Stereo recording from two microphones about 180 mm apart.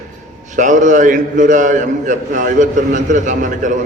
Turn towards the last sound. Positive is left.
turn(degrees=-45)  # may be behind; listen again after turning